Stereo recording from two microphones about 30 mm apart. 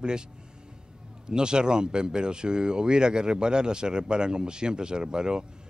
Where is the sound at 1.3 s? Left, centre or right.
Right.